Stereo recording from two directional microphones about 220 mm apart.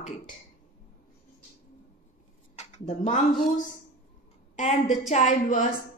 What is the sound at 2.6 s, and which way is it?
Speech, 30° left (ahead or behind).